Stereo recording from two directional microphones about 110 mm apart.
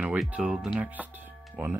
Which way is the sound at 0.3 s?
5° right (ahead or behind).